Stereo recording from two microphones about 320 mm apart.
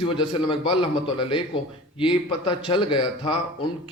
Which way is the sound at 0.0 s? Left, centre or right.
Centre.